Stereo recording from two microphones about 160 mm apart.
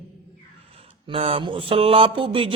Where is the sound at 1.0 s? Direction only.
35° right (ahead or behind).